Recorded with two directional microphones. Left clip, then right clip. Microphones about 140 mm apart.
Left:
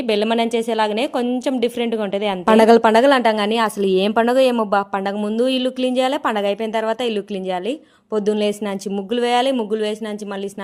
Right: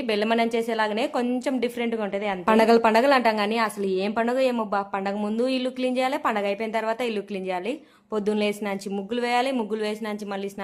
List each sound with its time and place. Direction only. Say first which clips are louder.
0.1 s a woman's voice: left 5 dB; 35° left (ahead or behind)
8.1 s speech: left 6 dB; 40° left (ahead or behind)